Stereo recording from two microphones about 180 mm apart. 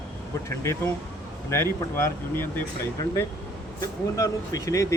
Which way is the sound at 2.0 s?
10° left (ahead or behind).